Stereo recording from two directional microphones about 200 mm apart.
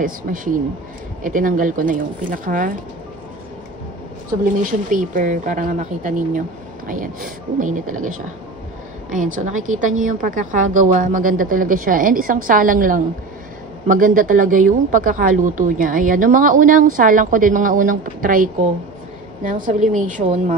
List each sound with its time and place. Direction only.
0.0 s a woman's voice: 45° right (ahead or behind)
4.6 s a woman's voice: 40° right (ahead or behind)